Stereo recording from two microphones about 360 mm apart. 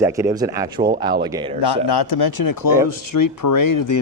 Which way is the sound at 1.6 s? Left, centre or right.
Left.